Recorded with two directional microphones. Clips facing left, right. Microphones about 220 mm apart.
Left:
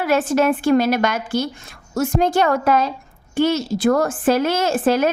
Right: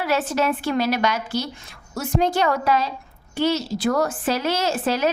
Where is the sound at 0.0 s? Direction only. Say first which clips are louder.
Left 5 dB; 50° left (ahead or behind).